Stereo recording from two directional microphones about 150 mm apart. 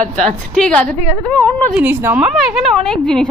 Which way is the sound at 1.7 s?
10° right (ahead or behind).